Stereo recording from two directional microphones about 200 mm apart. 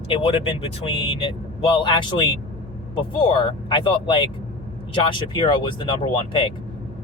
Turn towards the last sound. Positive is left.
turn(degrees=25)  # may be behind; listen again after turning